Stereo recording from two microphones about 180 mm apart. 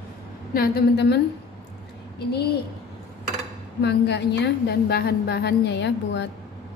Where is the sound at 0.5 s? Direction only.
60° left (ahead or behind).